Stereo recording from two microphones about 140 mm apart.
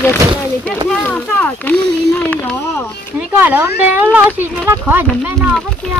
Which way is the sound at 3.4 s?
15° right (ahead or behind).